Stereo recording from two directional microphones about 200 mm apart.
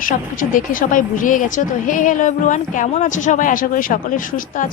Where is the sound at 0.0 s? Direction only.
40° left (ahead or behind).